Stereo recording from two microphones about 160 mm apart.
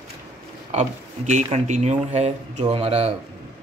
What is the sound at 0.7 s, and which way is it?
Speech, 50° right (ahead or behind).